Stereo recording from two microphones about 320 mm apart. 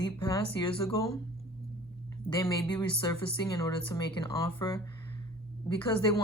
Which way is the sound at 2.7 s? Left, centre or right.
Centre.